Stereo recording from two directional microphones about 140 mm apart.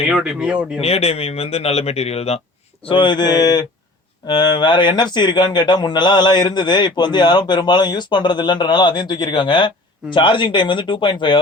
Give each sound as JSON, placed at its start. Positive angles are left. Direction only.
{"t": 0.1, "sound": "speech", "side_deg": -5}
{"t": 0.8, "sound": "speech", "side_deg": 45}
{"t": 2.8, "sound": "speech", "side_deg": 35}